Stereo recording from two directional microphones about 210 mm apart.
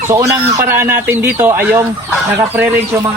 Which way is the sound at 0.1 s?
15° right (ahead or behind).